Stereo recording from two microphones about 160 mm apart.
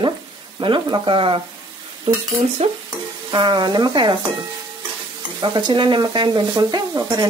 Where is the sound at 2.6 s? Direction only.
40° right (ahead or behind).